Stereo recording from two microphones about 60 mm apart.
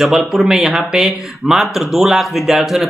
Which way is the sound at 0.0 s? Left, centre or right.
Centre.